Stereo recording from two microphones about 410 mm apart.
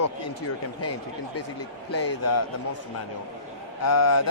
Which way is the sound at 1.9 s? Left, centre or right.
Left.